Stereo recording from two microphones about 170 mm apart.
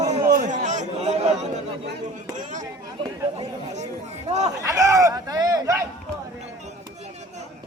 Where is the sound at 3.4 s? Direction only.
40° right (ahead or behind).